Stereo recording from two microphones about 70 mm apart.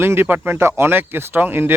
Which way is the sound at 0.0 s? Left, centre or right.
Right.